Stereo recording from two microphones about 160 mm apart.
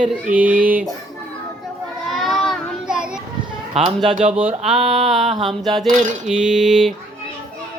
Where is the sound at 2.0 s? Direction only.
Centre (ahead or behind).